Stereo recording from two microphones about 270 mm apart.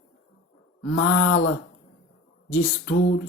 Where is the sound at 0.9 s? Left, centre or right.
Left.